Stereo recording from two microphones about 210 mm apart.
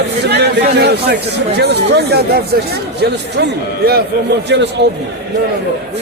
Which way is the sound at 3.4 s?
50° right (ahead or behind).